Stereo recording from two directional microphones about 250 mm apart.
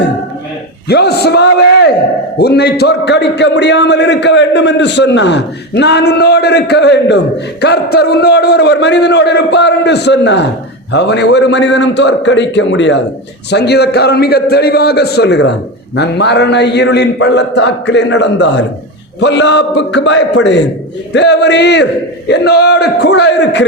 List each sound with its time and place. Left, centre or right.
0.9 s a man's voice: left